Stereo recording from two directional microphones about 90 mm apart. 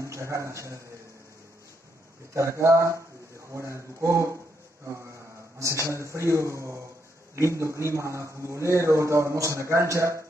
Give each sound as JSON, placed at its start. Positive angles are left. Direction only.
{"t": 0.0, "sound": "a man's voice", "side_deg": -35}
{"t": 2.3, "sound": "a man's voice", "side_deg": -35}
{"t": 5.6, "sound": "a man's voice", "side_deg": -35}